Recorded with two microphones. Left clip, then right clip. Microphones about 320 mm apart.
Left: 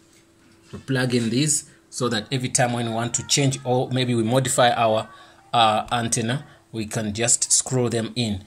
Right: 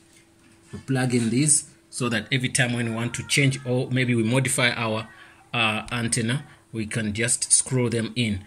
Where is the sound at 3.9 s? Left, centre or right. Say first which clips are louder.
Left 2 dB; left.